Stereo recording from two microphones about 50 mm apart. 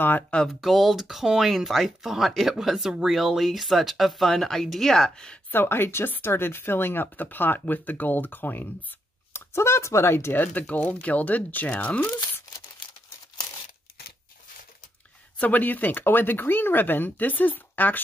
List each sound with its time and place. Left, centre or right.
0.6 s speech: centre
5.5 s a woman's voice: left
9.3 s speech: left
10.3 s speech: left
15.3 s speech: left